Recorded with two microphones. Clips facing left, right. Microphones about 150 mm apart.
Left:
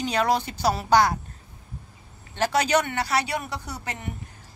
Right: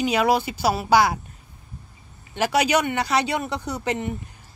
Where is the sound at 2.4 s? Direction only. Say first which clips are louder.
Right 2 dB; 10° right (ahead or behind).